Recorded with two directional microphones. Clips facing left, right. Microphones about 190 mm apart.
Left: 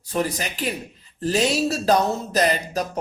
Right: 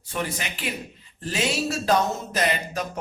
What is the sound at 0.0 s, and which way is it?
Speech, 40° left (ahead or behind).